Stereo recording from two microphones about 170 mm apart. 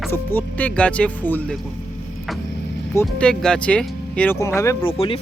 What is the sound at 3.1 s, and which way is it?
Speech, 5° left (ahead or behind).